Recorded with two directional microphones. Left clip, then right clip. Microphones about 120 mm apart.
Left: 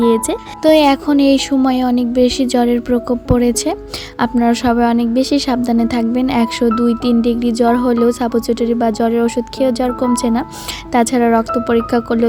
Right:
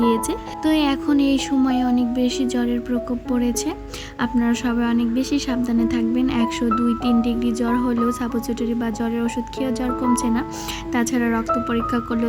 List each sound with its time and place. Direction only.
0.0 s a woman's voice: 50° left (ahead or behind)